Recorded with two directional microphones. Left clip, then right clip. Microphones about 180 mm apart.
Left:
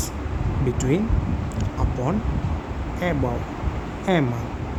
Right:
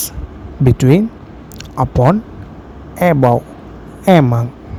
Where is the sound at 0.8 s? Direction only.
50° right (ahead or behind).